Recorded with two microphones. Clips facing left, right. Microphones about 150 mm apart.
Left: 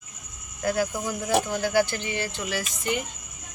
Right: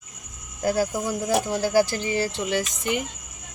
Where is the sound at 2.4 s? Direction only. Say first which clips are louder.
Right 4 dB; 20° right (ahead or behind).